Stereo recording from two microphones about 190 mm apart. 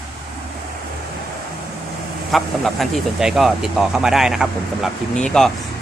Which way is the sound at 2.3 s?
Centre (ahead or behind).